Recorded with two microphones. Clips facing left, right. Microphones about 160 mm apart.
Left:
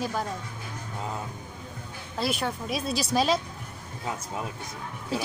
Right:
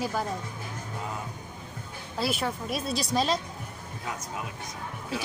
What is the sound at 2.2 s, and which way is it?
Speech, centre (ahead or behind).